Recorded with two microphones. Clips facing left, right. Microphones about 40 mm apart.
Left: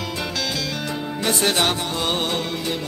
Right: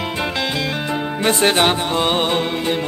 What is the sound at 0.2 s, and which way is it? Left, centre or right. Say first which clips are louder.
Music: right 5 dB; right.